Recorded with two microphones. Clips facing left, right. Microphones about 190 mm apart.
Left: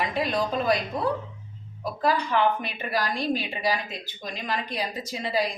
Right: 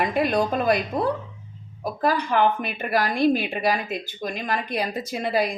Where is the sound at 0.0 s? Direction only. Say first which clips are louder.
Right 4 dB; 55° right (ahead or behind).